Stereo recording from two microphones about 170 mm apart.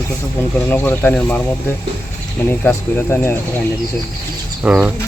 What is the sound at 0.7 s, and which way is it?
Speech, 10° left (ahead or behind).